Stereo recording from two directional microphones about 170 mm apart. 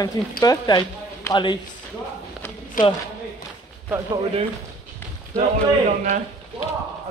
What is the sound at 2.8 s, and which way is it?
Speech, 50° left (ahead or behind).